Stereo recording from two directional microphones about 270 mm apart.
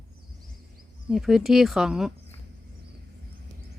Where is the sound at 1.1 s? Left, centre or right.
Centre.